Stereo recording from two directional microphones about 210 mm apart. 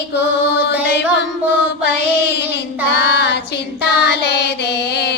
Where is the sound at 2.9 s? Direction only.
50° left (ahead or behind).